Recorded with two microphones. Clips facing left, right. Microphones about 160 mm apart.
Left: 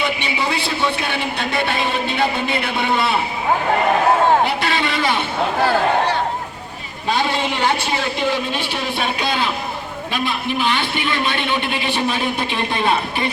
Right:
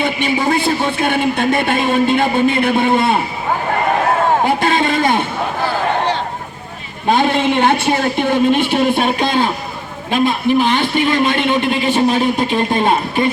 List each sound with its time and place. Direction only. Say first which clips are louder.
0.0 s a man's voice: right 5 dB; 50° right (ahead or behind)
4.4 s a sound: right 6 dB; 45° right (ahead or behind)
7.1 s a man's voice: right 6 dB; 50° right (ahead or behind)